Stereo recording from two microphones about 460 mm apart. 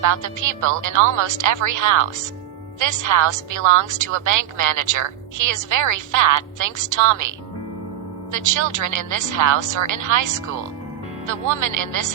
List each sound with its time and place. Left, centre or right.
0.0 s a woman's voice: right
8.3 s a woman's voice: right
11.5 s a woman's voice: right